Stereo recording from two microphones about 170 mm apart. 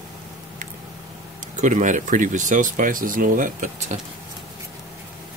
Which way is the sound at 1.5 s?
50° right (ahead or behind).